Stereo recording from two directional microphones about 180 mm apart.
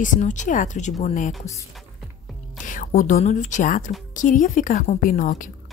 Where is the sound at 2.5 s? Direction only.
45° left (ahead or behind).